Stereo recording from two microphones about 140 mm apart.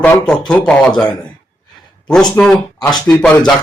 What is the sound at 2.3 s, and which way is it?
A man's voice, 5° left (ahead or behind).